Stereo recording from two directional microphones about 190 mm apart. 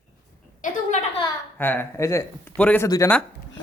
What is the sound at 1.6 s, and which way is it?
Speech, 10° left (ahead or behind).